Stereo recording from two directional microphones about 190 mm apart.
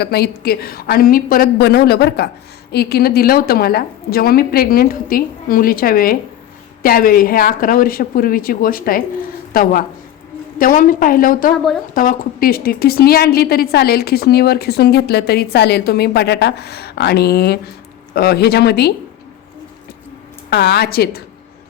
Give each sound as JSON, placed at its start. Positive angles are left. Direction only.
{"t": 0.0, "sound": "a woman's voice", "side_deg": 60}
{"t": 11.5, "sound": "speech", "side_deg": 0}
{"t": 11.9, "sound": "a woman's voice", "side_deg": 45}
{"t": 20.5, "sound": "a woman's voice", "side_deg": 60}